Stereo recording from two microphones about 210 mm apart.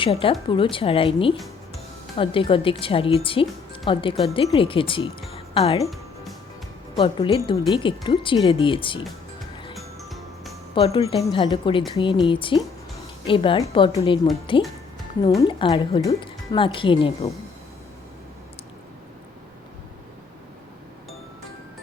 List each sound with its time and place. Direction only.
0.0 s speech: 25° left (ahead or behind)
5.3 s music: 25° left (ahead or behind)
6.9 s speech: 25° left (ahead or behind)
9.7 s music: centre (ahead or behind)
10.8 s speech: 30° left (ahead or behind)